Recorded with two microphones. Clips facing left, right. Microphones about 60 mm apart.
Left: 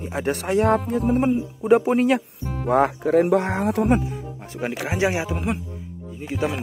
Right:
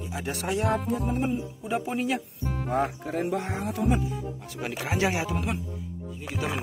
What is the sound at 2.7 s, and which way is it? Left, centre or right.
Speech, left.